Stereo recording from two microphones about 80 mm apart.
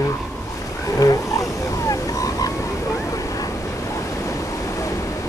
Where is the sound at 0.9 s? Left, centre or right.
Left.